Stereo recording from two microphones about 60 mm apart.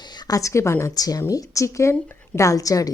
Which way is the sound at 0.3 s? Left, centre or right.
Left.